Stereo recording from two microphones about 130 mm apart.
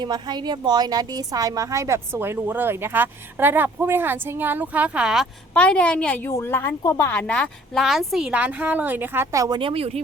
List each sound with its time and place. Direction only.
0.0 s a woman's voice: 35° right (ahead or behind); by 5.3 s 5° right (ahead or behind)
5.5 s a woman's voice: 10° left (ahead or behind)
7.1 s a woman's voice: 10° left (ahead or behind); by 9.6 s 25° right (ahead or behind)
9.6 s a woman's voice: 45° right (ahead or behind)